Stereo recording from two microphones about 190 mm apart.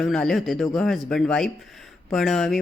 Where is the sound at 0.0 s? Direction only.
Centre (ahead or behind).